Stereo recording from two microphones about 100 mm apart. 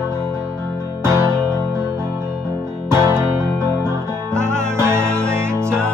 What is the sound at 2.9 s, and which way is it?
Music, 25° right (ahead or behind).